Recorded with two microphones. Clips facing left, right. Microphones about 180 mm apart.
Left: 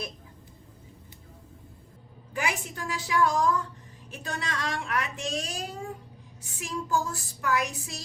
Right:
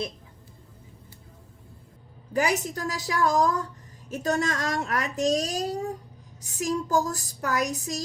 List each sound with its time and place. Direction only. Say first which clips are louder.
2.3 s a woman's voice: right 7 dB; 40° right (ahead or behind)